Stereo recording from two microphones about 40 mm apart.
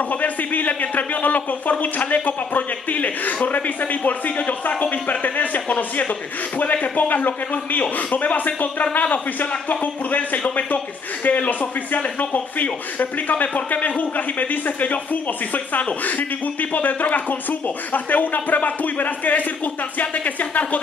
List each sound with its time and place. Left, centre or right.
0.1 s speech: left